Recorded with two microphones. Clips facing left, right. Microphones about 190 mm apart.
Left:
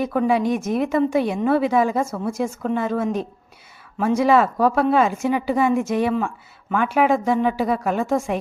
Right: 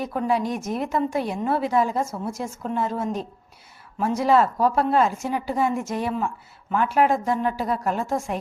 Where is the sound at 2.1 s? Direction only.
60° left (ahead or behind).